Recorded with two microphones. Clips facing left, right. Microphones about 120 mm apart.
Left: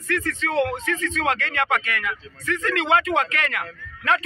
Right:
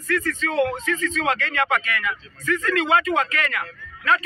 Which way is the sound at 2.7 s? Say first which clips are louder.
Even; 65° left (ahead or behind).